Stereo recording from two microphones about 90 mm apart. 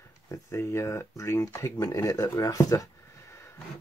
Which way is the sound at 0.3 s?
35° left (ahead or behind).